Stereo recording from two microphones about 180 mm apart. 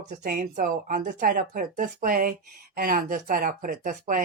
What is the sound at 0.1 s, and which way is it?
Speech, 45° right (ahead or behind).